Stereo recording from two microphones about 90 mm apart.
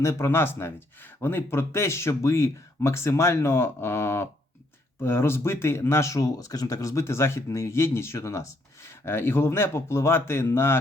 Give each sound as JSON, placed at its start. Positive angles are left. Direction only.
{"t": 0.0, "sound": "speech", "side_deg": 30}